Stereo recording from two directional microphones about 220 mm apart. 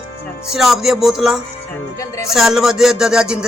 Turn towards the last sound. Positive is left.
turn(degrees=-5)  # may be behind; listen again after turning